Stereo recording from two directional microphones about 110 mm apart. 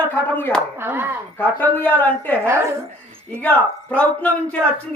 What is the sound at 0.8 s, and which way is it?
Speech, 20° right (ahead or behind).